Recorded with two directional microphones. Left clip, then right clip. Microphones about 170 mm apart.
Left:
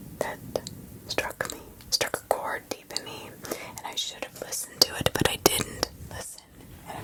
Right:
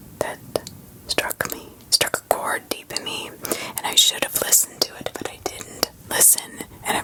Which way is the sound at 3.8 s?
25° right (ahead or behind).